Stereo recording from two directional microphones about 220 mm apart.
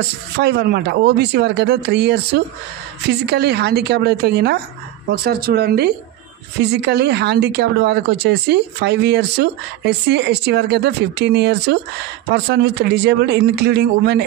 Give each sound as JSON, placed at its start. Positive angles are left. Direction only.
{"t": 0.4, "sound": "speech", "side_deg": -50}